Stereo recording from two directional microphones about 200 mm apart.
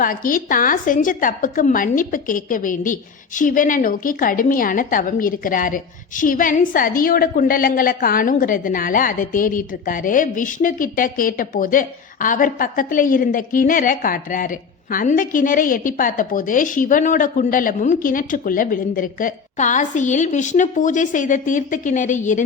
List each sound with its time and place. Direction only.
0.0 s a woman's voice: 45° left (ahead or behind)